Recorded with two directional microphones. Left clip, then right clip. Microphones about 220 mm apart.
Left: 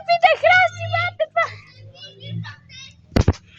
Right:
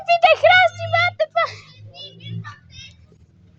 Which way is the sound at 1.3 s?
25° right (ahead or behind).